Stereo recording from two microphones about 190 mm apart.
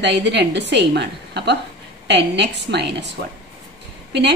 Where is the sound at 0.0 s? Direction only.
65° right (ahead or behind).